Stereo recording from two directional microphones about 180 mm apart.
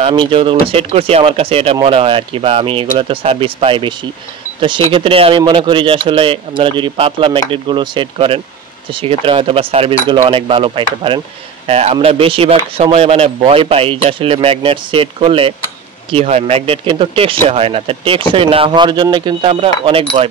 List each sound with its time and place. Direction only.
0.0 s speech: 30° right (ahead or behind)